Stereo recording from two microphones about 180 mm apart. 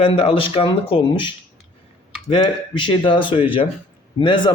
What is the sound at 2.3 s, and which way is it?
A man's voice, 30° left (ahead or behind).